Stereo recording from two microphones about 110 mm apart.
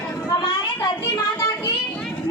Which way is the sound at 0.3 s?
40° left (ahead or behind).